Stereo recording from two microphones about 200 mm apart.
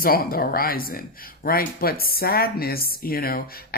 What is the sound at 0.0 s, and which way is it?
Speech, 45° left (ahead or behind).